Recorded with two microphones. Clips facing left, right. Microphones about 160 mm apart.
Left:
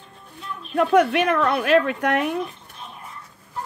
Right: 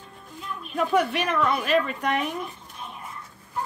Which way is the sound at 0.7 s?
65° left (ahead or behind).